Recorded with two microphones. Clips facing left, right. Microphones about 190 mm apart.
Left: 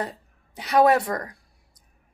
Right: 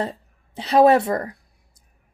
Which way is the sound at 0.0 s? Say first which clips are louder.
Right 4 dB; 25° right (ahead or behind).